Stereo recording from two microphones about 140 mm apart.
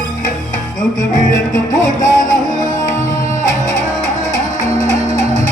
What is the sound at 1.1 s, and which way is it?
Music, 65° left (ahead or behind).